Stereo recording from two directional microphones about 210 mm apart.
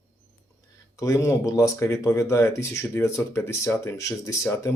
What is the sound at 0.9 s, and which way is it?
Speech, 15° left (ahead or behind).